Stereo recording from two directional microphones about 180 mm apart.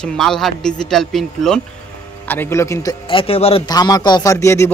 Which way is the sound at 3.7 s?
20° left (ahead or behind).